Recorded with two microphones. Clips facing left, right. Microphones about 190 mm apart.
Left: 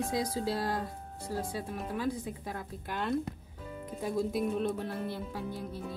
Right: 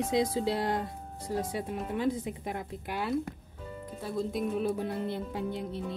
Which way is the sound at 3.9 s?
15° left (ahead or behind).